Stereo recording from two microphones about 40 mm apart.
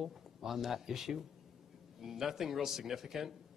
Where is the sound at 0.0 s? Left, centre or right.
Centre.